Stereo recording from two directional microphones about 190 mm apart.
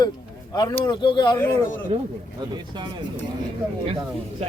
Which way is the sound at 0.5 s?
20° left (ahead or behind).